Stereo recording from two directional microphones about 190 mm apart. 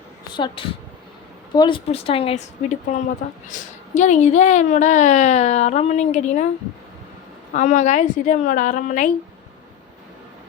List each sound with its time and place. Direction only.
0.3 s a woman's voice: 25° left (ahead or behind)
7.5 s a woman's voice: 40° left (ahead or behind)